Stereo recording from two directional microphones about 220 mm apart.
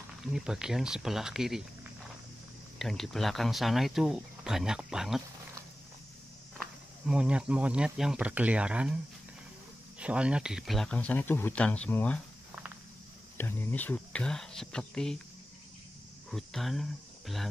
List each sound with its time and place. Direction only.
0.2 s speech: centre (ahead or behind)
2.8 s speech: centre (ahead or behind)
6.6 s speech: 5° right (ahead or behind)
9.9 s speech: 5° right (ahead or behind)
13.4 s speech: 10° left (ahead or behind)
16.3 s speech: centre (ahead or behind)